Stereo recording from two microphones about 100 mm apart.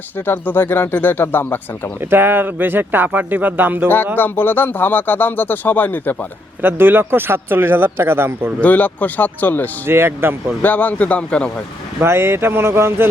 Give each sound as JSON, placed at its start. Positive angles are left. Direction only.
{"t": 0.3, "sound": "speech", "side_deg": 20}
{"t": 2.0, "sound": "speech", "side_deg": -20}
{"t": 4.2, "sound": "speech", "side_deg": 20}
{"t": 6.6, "sound": "speech", "side_deg": -20}
{"t": 8.6, "sound": "speech", "side_deg": 15}
{"t": 9.8, "sound": "speech", "side_deg": -25}
{"t": 10.6, "sound": "speech", "side_deg": 15}
{"t": 11.9, "sound": "speech", "side_deg": -25}